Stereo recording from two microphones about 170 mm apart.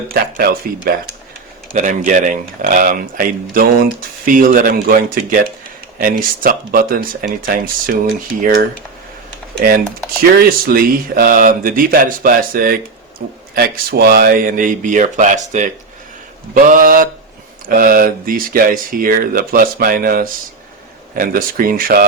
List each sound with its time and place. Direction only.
0.1 s speech: 60° right (ahead or behind)
1.7 s speech: 50° right (ahead or behind)
10.3 s speech: 60° right (ahead or behind)